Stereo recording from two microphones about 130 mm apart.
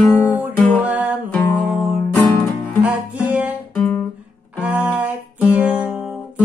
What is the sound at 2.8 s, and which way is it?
Music, 10° right (ahead or behind).